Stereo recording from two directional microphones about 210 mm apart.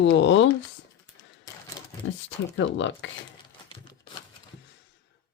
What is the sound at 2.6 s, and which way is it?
Speech, 60° left (ahead or behind).